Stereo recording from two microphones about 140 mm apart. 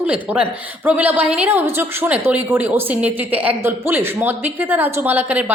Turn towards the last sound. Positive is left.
turn(degrees=-10)  # may be behind; listen again after turning